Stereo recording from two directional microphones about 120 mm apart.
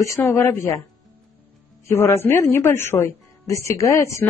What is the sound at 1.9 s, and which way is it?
Speech, 20° left (ahead or behind).